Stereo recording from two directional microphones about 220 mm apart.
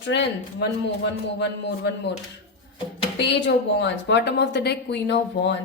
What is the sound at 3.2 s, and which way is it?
A woman's voice, 50° left (ahead or behind).